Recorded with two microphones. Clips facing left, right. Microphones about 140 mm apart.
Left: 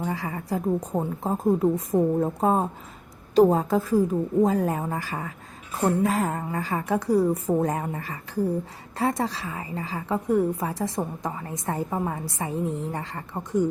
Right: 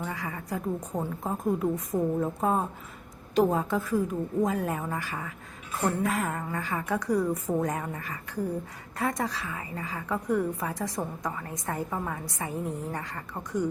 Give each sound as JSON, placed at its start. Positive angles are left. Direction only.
{"t": 0.0, "sound": "a woman's voice", "side_deg": 30}